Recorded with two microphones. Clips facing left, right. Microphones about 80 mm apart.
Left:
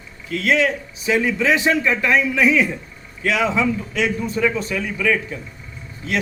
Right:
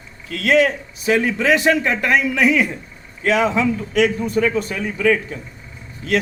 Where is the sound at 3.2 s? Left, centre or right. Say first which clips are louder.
Right 2 dB; right.